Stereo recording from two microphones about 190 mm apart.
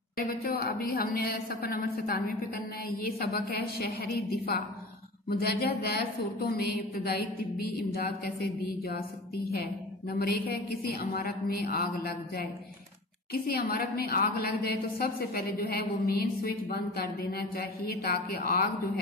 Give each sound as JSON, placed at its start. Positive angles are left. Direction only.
{"t": 0.2, "sound": "a woman's voice", "side_deg": 55}
{"t": 10.1, "sound": "a woman's voice", "side_deg": 55}